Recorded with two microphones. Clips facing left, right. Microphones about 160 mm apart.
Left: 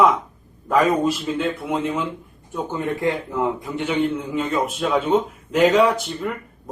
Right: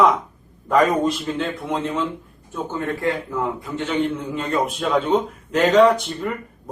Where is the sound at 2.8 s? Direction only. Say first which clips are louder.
Left 1 dB; 20° left (ahead or behind).